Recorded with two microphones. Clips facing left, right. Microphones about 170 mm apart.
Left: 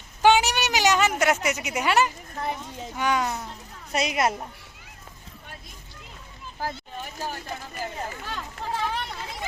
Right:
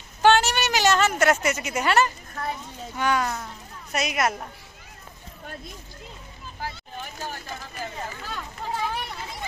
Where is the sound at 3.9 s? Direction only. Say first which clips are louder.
Left 1 dB; 30° left (ahead or behind).